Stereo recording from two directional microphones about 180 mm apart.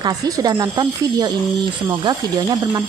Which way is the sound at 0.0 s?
20° right (ahead or behind).